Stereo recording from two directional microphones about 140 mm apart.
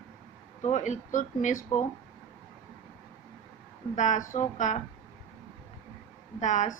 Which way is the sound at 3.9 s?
60° left (ahead or behind).